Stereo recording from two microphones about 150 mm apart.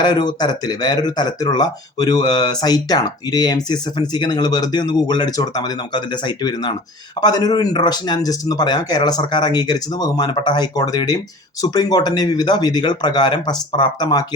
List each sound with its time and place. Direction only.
0.0 s speech: 30° left (ahead or behind)